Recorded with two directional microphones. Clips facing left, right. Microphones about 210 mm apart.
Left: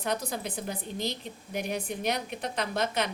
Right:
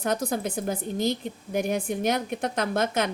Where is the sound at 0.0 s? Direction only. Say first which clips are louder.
Right 5 dB; 45° right (ahead or behind).